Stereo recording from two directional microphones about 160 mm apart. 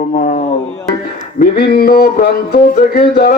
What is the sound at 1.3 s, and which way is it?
Speech, 70° left (ahead or behind).